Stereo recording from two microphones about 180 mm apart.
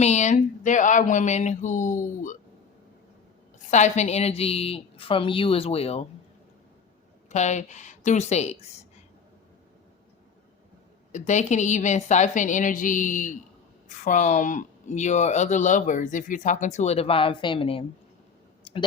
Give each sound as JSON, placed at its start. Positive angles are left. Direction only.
{"t": 0.0, "sound": "a sound", "side_deg": 40}
{"t": 3.7, "sound": "speech", "side_deg": 40}
{"t": 7.3, "sound": "speech", "side_deg": 40}
{"t": 11.1, "sound": "a sound", "side_deg": 40}
{"t": 13.8, "sound": "speech", "side_deg": 45}
{"t": 18.6, "sound": "clicking", "side_deg": 30}